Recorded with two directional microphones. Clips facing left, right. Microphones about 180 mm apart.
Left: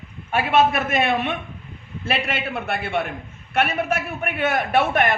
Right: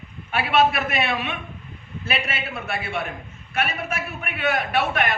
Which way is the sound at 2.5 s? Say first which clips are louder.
Left 4 dB; 60° left (ahead or behind).